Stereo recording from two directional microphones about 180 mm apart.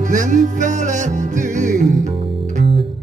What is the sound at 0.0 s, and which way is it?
Music, 45° right (ahead or behind).